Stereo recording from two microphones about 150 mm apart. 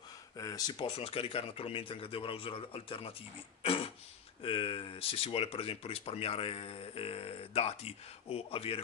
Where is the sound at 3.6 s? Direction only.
40° left (ahead or behind).